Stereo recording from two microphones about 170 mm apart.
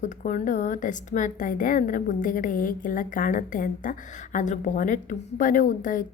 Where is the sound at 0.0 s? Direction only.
45° left (ahead or behind).